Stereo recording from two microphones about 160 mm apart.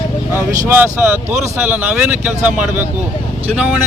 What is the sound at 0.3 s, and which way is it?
Speech, 15° right (ahead or behind).